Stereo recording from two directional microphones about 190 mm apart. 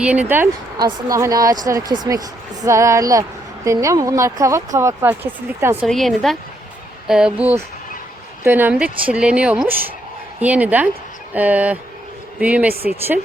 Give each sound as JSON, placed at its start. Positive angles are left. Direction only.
{"t": 0.0, "sound": "speech", "side_deg": -5}
{"t": 0.8, "sound": "a woman's voice", "side_deg": -20}
{"t": 5.8, "sound": "a woman's voice", "side_deg": 0}
{"t": 12.7, "sound": "speech", "side_deg": -50}